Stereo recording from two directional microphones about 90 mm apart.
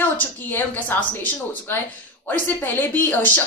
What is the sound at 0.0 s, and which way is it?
A woman's voice, 20° left (ahead or behind).